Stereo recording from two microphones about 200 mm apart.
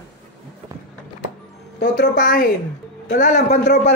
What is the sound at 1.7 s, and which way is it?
Speech, 60° left (ahead or behind).